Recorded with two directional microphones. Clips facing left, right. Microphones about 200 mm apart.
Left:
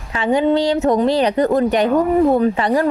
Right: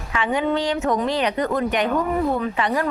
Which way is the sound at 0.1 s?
35° left (ahead or behind).